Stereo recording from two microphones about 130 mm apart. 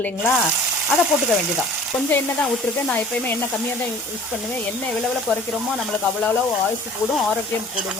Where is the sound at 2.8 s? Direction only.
10° left (ahead or behind).